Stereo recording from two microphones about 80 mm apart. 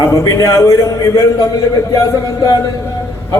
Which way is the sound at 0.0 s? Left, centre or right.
Left.